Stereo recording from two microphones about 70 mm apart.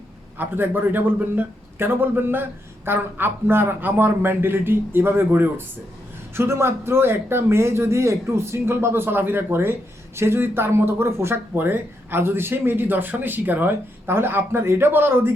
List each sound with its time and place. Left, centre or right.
0.3 s a man's voice: right